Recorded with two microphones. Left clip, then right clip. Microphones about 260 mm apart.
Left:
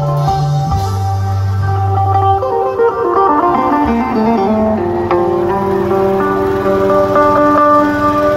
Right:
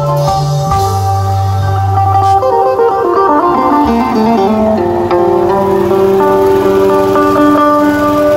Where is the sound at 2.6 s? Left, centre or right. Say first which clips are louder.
Right 3 dB; right.